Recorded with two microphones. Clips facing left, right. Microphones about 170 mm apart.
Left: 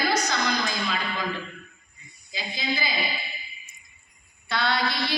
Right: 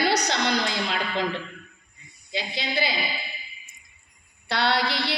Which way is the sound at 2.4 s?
75° right (ahead or behind).